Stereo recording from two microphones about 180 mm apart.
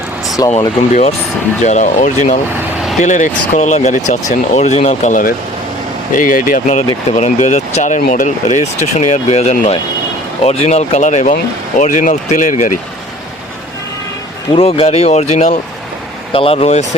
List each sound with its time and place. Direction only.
0.4 s speech: 20° left (ahead or behind)
1.6 s speech: 40° left (ahead or behind)
14.5 s speech: 30° left (ahead or behind)